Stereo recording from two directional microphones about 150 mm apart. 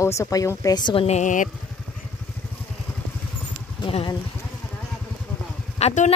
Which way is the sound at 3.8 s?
35° left (ahead or behind).